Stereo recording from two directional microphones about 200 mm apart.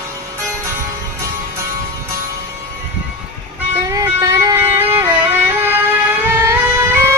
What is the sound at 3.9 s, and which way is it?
Music, 15° right (ahead or behind).